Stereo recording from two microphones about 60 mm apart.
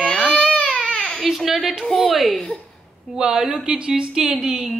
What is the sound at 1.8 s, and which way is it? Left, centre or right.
Speech, centre.